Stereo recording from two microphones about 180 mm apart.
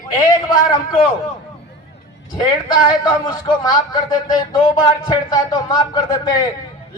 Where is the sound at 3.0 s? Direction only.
20° left (ahead or behind).